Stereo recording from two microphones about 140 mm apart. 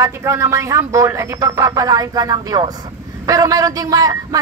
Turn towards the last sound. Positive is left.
turn(degrees=-25)  # may be behind; listen again after turning